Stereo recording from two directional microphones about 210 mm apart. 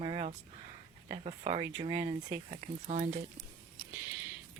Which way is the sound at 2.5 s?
30° right (ahead or behind).